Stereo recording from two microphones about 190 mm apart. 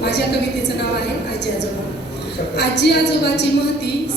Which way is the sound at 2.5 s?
60° left (ahead or behind).